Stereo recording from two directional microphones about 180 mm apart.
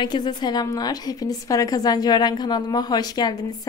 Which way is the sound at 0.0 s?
25° left (ahead or behind).